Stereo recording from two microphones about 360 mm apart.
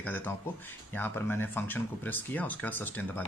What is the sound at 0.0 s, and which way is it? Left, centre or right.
Speech, centre.